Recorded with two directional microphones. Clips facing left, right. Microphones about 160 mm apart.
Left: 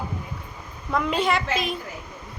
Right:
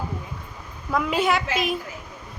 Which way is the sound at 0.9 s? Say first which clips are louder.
Right 1 dB; centre (ahead or behind).